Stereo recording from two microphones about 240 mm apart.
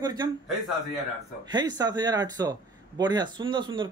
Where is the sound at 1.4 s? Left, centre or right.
Centre.